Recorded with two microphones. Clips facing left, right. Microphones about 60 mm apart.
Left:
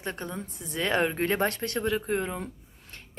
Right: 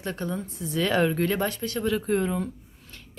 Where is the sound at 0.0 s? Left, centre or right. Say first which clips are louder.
Right 3 dB; left.